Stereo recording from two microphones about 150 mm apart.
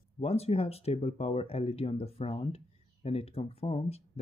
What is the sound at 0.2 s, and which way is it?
Speech, 45° left (ahead or behind).